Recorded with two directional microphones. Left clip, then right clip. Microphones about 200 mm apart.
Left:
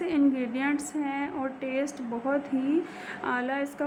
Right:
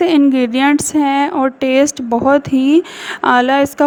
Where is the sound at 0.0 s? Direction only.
50° right (ahead or behind).